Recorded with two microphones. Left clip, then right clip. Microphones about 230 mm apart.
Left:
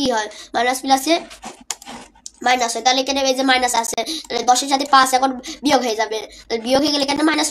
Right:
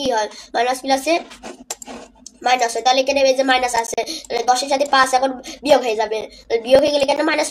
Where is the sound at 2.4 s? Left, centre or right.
Left.